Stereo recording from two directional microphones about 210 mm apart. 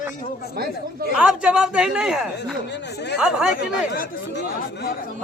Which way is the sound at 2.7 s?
50° left (ahead or behind).